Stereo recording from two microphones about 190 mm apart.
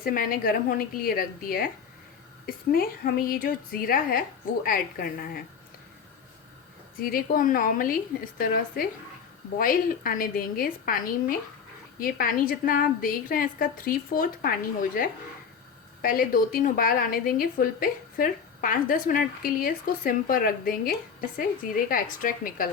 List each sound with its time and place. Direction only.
0.0 s a woman's voice: 50° left (ahead or behind)
7.0 s a woman's voice: 50° left (ahead or behind)
16.0 s a woman's voice: 50° left (ahead or behind)